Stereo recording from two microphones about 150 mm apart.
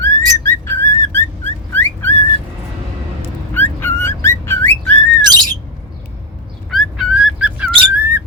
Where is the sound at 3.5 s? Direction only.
15° left (ahead or behind).